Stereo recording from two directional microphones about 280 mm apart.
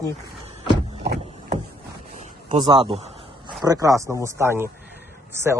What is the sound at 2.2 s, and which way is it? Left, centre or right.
Speech, centre.